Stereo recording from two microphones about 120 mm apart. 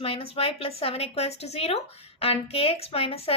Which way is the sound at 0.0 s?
55° left (ahead or behind).